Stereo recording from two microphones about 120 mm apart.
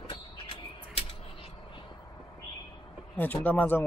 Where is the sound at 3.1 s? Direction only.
15° left (ahead or behind).